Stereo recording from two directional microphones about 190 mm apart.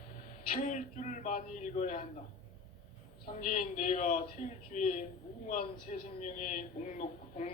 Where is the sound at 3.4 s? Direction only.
45° left (ahead or behind).